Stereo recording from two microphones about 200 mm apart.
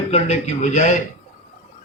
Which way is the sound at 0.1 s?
35° left (ahead or behind).